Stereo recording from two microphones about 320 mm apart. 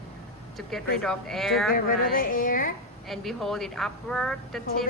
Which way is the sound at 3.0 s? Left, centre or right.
Centre.